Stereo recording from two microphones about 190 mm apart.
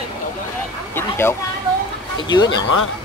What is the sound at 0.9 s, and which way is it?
Speech, 10° left (ahead or behind).